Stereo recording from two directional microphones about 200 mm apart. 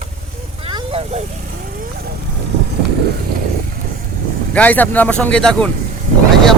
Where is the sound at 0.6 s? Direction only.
30° right (ahead or behind).